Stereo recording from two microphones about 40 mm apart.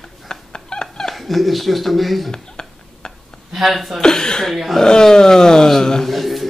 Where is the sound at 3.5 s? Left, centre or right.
Centre.